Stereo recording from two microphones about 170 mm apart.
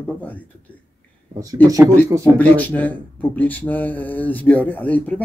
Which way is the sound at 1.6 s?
20° right (ahead or behind).